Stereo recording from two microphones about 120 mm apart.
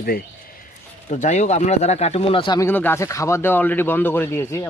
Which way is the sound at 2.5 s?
15° left (ahead or behind).